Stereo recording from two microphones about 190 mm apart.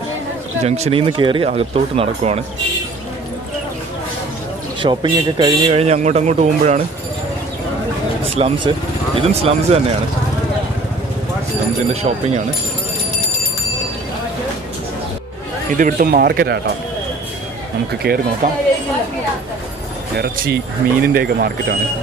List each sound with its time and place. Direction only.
0.6 s speech: 35° right (ahead or behind)
4.8 s speech: 25° right (ahead or behind)
8.4 s speech: 30° right (ahead or behind)
11.9 s speech: 35° right (ahead or behind)
15.8 s speech: 50° right (ahead or behind)
18.0 s speech: 50° right (ahead or behind)
20.2 s speech: 55° right (ahead or behind)